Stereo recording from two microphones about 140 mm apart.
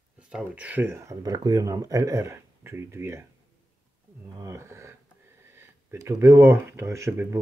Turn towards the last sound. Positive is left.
turn(degrees=-20)  # may be behind; listen again after turning